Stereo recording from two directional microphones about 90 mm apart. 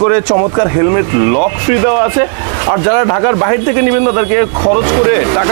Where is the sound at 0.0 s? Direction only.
25° right (ahead or behind).